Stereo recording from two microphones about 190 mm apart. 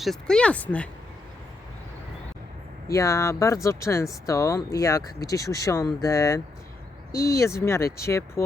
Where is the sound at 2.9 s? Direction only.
15° left (ahead or behind).